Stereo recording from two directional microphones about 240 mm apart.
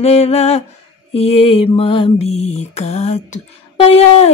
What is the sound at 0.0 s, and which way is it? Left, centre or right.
Mantra, left.